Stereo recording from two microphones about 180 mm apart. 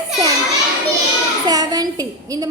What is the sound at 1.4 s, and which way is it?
A woman's voice, 20° right (ahead or behind).